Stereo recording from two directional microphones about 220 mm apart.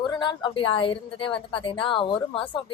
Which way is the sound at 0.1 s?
20° left (ahead or behind).